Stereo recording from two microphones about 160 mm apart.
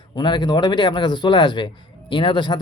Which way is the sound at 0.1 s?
30° left (ahead or behind).